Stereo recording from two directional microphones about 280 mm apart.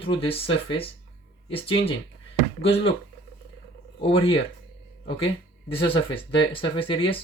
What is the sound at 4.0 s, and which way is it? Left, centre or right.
Speech, centre.